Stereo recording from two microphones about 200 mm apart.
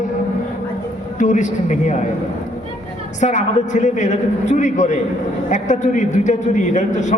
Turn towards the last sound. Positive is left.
turn(degrees=35)  # may be behind; listen again after turning